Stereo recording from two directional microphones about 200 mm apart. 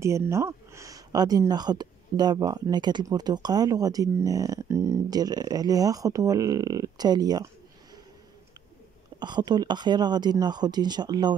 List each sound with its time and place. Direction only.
0.0 s speech: 15° right (ahead or behind)
9.2 s speech: 20° right (ahead or behind)